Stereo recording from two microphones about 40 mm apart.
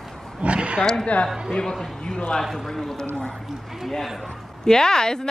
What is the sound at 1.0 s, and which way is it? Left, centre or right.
Speech, left.